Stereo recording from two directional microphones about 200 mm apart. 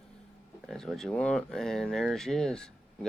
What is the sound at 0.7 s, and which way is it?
Speech, centre (ahead or behind).